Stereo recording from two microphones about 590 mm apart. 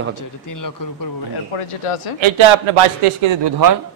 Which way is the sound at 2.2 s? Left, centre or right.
Right.